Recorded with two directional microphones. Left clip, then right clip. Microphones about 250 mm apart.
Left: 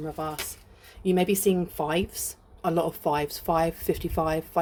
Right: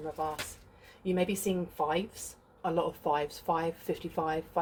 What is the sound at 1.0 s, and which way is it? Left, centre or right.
Speech, left.